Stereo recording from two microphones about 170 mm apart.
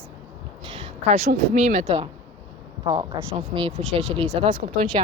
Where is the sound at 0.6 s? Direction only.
45° right (ahead or behind).